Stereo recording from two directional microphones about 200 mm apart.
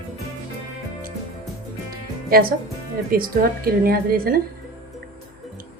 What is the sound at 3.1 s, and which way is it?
A woman's voice, 45° right (ahead or behind).